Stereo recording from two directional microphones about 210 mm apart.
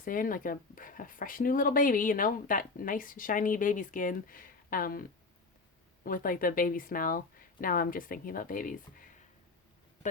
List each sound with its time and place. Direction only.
0.0 s speech: 40° left (ahead or behind)